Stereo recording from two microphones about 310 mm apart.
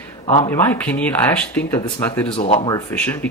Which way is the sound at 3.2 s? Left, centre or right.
Centre.